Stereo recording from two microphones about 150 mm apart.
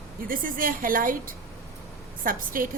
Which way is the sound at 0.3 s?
70° right (ahead or behind).